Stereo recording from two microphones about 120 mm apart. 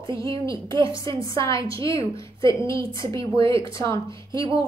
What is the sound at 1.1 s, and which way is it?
Speech, 45° right (ahead or behind).